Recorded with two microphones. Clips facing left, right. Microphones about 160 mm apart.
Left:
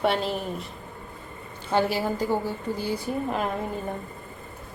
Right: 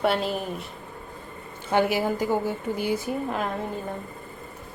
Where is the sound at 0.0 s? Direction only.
Centre (ahead or behind).